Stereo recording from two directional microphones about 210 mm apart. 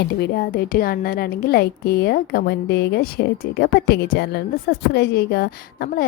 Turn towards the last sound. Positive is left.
turn(degrees=45)  # may be behind; listen again after turning